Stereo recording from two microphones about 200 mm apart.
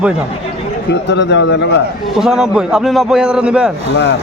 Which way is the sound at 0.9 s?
60° left (ahead or behind).